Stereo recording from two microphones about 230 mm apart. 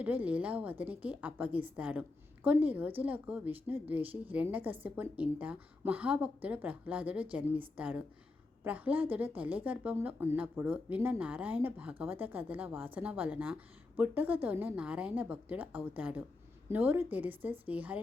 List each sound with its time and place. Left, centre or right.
0.0 s a woman's voice: centre